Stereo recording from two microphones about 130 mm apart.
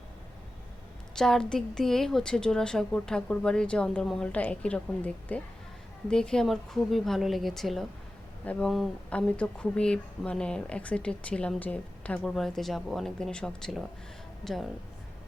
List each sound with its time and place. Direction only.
1.1 s a woman's voice: 5° left (ahead or behind)